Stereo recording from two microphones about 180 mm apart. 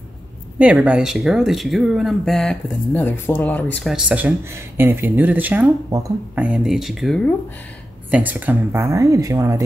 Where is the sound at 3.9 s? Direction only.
5° right (ahead or behind).